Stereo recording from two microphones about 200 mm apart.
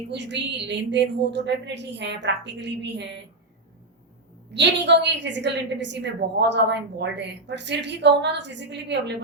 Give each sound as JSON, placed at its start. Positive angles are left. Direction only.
{"t": 0.1, "sound": "a woman's voice", "side_deg": -60}
{"t": 4.5, "sound": "a woman's voice", "side_deg": -60}